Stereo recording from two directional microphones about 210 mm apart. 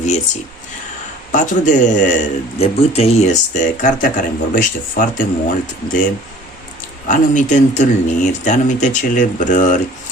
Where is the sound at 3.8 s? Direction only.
40° left (ahead or behind).